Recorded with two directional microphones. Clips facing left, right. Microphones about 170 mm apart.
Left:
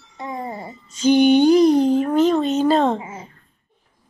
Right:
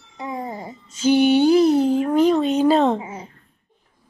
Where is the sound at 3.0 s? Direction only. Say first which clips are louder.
Right 1 dB; 15° right (ahead or behind).